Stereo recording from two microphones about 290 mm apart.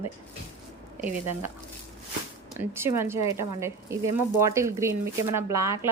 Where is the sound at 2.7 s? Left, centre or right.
Centre.